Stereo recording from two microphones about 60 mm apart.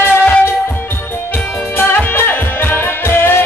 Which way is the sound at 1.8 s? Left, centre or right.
Left.